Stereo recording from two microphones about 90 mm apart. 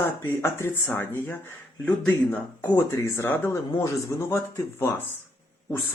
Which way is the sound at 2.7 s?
30° left (ahead or behind).